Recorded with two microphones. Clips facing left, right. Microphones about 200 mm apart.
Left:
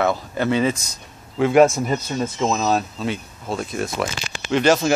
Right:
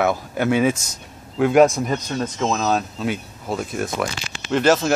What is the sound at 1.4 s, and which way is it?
Speech, centre (ahead or behind).